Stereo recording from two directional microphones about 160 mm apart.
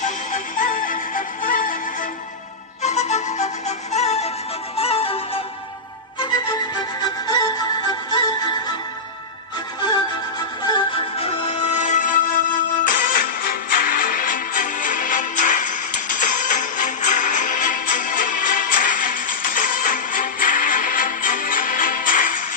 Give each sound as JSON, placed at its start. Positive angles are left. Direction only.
{"t": 0.0, "sound": "music", "side_deg": 55}
{"t": 2.8, "sound": "music", "side_deg": 45}
{"t": 6.1, "sound": "music", "side_deg": 25}
{"t": 10.7, "sound": "music", "side_deg": 35}